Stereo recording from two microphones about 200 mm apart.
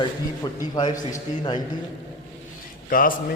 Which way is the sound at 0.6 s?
20° left (ahead or behind).